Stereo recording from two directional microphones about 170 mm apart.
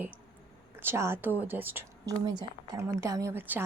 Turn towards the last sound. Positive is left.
turn(degrees=-10)  # may be behind; listen again after turning